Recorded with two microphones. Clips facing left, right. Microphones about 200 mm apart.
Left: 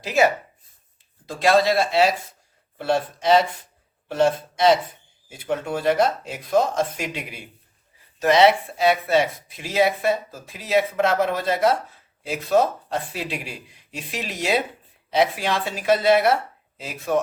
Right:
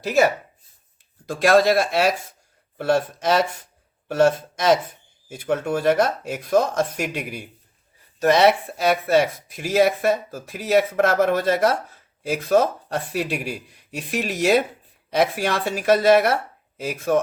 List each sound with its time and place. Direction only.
1.3 s speech: 50° right (ahead or behind)